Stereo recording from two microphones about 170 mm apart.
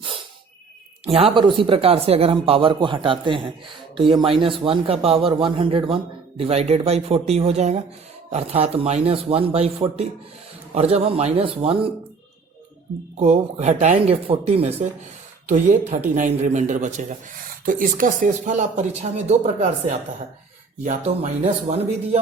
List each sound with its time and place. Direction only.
1.0 s a man's voice: 35° right (ahead or behind)
13.1 s a man's voice: 40° right (ahead or behind)
20.8 s a man's voice: 40° right (ahead or behind)